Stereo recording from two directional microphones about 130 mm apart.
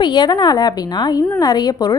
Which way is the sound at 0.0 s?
35° left (ahead or behind).